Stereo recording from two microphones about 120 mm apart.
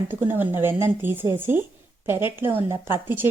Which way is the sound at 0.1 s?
15° right (ahead or behind).